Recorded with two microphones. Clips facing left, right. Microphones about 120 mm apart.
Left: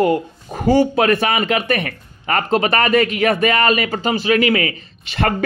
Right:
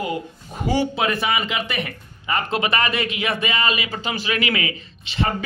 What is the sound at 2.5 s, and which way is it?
Speech, 45° left (ahead or behind).